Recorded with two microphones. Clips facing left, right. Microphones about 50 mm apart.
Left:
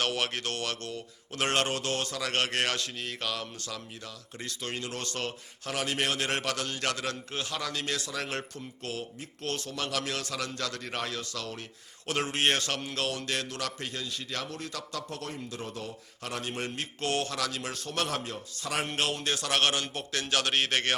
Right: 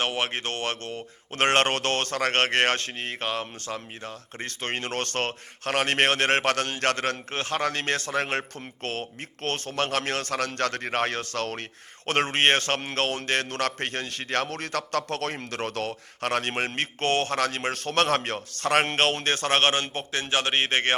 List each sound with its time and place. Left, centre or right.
0.0 s speech: right